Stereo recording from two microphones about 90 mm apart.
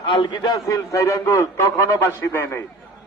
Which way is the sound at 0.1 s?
60° left (ahead or behind).